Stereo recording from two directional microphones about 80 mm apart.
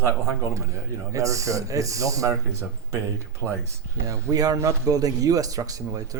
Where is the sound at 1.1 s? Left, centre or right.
Right.